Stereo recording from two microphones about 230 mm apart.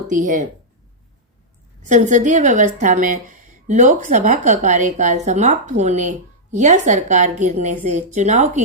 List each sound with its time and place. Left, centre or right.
0.1 s a woman's voice: right
1.9 s a woman's voice: right